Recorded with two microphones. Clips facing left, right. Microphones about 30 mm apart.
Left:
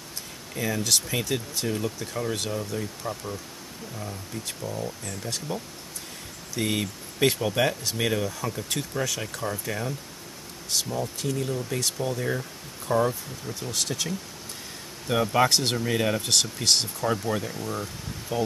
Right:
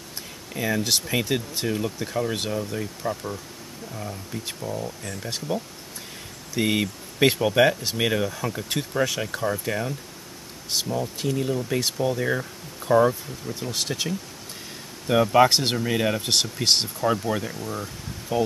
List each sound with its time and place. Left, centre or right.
0.6 s speech: centre
11.1 s speech: centre